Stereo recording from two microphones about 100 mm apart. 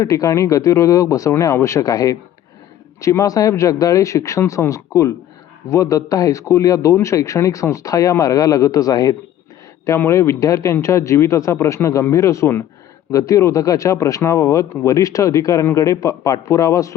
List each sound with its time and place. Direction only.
0.0 s a man's voice: 35° left (ahead or behind)